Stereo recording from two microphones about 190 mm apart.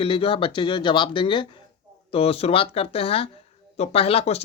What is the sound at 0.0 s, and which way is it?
Speech, 30° left (ahead or behind).